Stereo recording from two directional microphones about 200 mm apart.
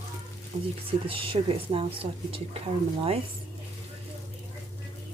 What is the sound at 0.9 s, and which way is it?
Speech, 25° right (ahead or behind).